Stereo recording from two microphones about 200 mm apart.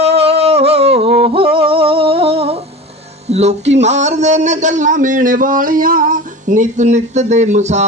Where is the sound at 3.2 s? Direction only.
35° right (ahead or behind).